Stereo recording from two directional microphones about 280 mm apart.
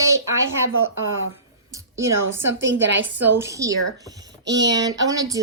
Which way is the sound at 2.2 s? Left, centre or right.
Right.